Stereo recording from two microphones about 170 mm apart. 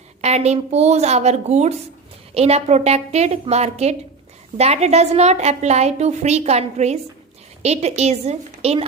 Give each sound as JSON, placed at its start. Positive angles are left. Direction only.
{"t": 0.2, "sound": "a woman's voice", "side_deg": -40}